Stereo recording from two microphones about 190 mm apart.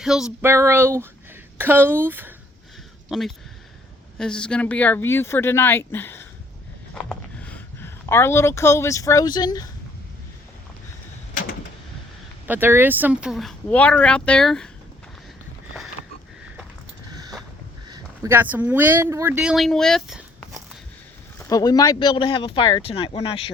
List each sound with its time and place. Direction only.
0.0 s speech: centre (ahead or behind)
3.1 s speech: centre (ahead or behind); by 9.6 s 20° left (ahead or behind)
12.5 s speech: 10° right (ahead or behind)
17.1 s a sound: 20° right (ahead or behind)
17.8 s speech: 20° right (ahead or behind); by 20.6 s 5° right (ahead or behind)
21.3 s speech: 20° left (ahead or behind)